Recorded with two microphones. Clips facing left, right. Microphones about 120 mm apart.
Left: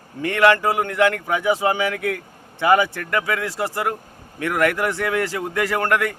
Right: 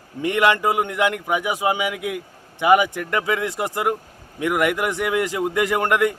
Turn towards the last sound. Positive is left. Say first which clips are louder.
# right 1 dB
turn(degrees=-20)  # may be behind; listen again after turning